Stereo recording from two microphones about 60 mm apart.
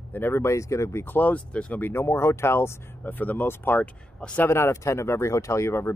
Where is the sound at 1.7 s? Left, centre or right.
Left.